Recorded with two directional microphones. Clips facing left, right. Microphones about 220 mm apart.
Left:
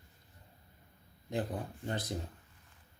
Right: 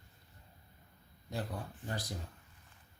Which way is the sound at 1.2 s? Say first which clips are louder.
Left 4 dB; 20° left (ahead or behind).